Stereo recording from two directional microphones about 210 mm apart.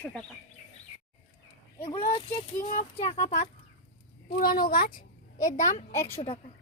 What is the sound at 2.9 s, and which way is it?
Speech, 30° left (ahead or behind).